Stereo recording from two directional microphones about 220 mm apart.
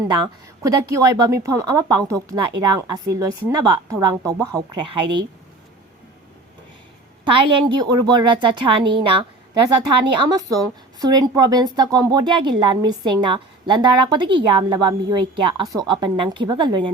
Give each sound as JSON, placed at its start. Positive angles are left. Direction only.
{"t": 0.0, "sound": "a woman's voice", "side_deg": -15}
{"t": 7.3, "sound": "speech", "side_deg": -20}